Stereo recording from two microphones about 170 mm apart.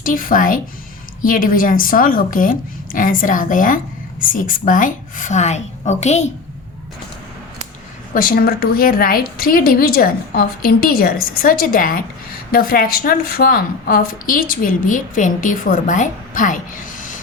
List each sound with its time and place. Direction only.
0.0 s a woman's voice: 55° left (ahead or behind)
8.1 s a woman's voice: 55° left (ahead or behind)